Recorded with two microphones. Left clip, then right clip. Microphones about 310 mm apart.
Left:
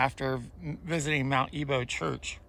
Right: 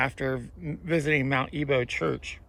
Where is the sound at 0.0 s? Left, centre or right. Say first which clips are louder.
Right 1 dB; centre.